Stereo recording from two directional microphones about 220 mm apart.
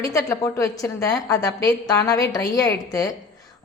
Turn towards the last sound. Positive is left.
turn(degrees=15)  # may be behind; listen again after turning